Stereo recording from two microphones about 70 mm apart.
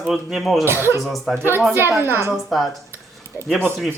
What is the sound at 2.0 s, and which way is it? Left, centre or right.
Speech, right.